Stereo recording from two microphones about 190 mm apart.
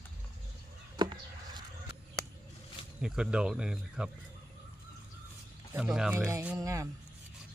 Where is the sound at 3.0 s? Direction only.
5° right (ahead or behind).